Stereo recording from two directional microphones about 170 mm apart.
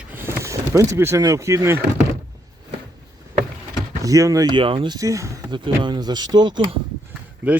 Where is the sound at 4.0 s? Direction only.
20° right (ahead or behind).